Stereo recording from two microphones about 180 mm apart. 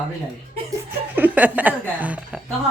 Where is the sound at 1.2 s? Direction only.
10° right (ahead or behind).